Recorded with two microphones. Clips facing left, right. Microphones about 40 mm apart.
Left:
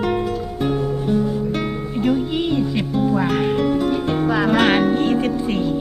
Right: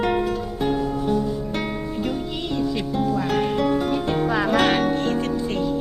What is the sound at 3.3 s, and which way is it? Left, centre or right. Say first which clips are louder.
Music: left 2 dB; centre.